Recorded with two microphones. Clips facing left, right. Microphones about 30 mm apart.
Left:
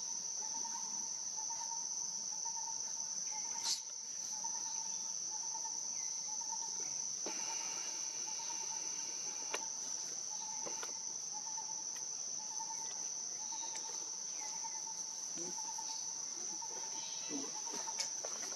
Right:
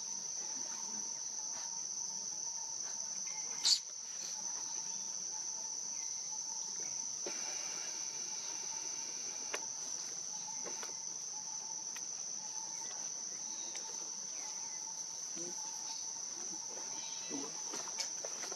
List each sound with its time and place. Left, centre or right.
3.6 s cricket: right